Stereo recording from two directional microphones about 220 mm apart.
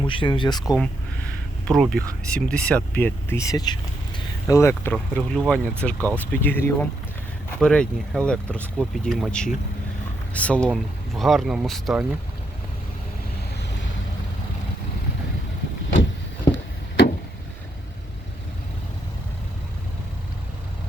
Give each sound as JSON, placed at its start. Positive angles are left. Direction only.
{"t": 0.0, "sound": "speech", "side_deg": 20}
{"t": 0.6, "sound": "speech", "side_deg": 0}